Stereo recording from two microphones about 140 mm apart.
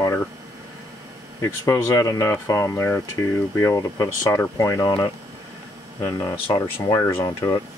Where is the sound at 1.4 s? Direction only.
20° left (ahead or behind).